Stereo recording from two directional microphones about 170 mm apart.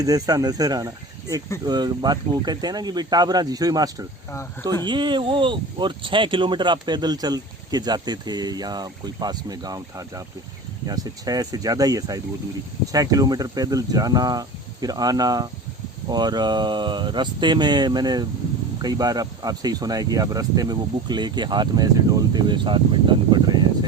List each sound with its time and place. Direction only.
0.0 s speech: 20° right (ahead or behind)
10.8 s speech: 20° right (ahead or behind)